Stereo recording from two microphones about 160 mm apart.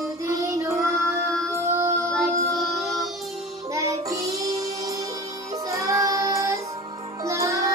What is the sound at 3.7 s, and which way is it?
Music, 20° right (ahead or behind).